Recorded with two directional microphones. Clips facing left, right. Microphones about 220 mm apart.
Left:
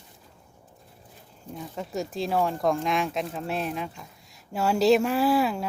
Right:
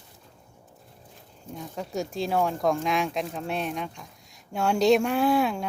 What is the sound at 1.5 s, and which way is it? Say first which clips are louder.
Speech: even; centre (ahead or behind).